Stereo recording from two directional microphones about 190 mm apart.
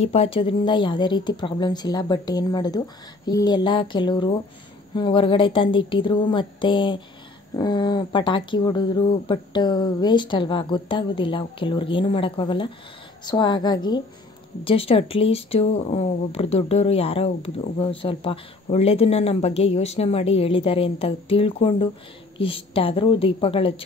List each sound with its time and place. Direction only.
0.0 s speech: 30° left (ahead or behind)